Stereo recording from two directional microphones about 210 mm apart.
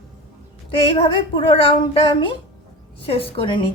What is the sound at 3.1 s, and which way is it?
Speech, 25° left (ahead or behind).